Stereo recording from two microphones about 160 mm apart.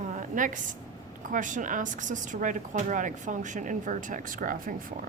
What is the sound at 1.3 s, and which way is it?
Speech, 50° right (ahead or behind).